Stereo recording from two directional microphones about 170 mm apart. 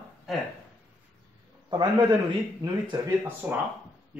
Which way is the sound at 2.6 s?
25° right (ahead or behind).